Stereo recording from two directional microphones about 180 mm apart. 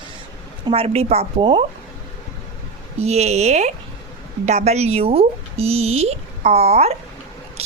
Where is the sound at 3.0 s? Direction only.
35° right (ahead or behind).